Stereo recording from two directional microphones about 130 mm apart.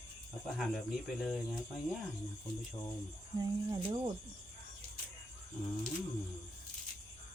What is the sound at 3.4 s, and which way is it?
Speech, 30° right (ahead or behind).